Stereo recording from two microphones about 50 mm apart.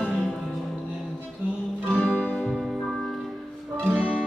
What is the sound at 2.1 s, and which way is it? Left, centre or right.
Music, left.